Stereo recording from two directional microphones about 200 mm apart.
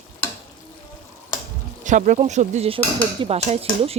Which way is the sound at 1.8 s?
40° right (ahead or behind).